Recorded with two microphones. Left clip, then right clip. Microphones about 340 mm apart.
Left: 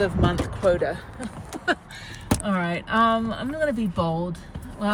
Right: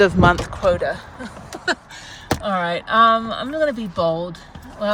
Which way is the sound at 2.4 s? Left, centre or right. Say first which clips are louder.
Right 8 dB; centre.